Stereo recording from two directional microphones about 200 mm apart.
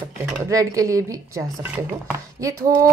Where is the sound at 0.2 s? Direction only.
15° right (ahead or behind).